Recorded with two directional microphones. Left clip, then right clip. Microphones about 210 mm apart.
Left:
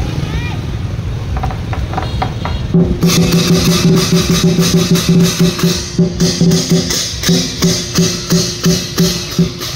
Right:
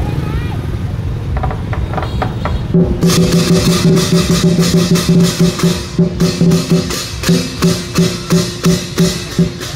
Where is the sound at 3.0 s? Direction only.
30° left (ahead or behind).